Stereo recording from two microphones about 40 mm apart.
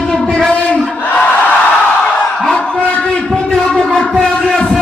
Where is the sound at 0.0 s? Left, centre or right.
Left.